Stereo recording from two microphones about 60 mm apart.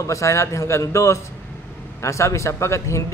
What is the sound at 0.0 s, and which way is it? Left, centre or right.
A man's voice, left.